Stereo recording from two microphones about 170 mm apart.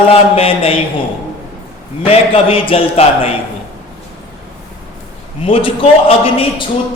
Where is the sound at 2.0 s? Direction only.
35° left (ahead or behind).